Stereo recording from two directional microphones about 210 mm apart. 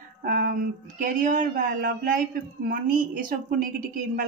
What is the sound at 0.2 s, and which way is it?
A woman's voice, 45° right (ahead or behind).